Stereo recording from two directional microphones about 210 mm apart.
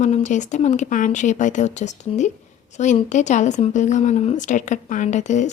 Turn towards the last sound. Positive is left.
turn(degrees=35)  # may be behind; listen again after turning